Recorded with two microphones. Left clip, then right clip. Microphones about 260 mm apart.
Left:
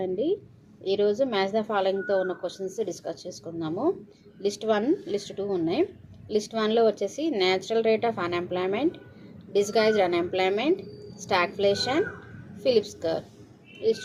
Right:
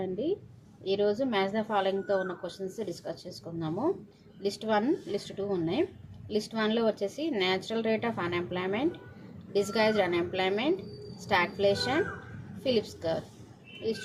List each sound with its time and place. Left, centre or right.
0.0 s a woman's voice: centre